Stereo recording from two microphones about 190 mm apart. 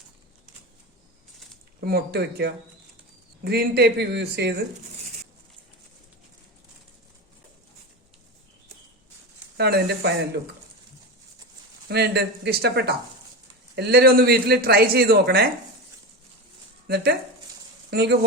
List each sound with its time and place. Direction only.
1.8 s speech: 55° right (ahead or behind)
9.6 s speech: 60° right (ahead or behind)
11.9 s speech: 60° right (ahead or behind)
16.8 s speech: 55° right (ahead or behind)